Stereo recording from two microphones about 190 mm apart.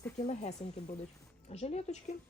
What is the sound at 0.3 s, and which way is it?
Speech, 35° left (ahead or behind).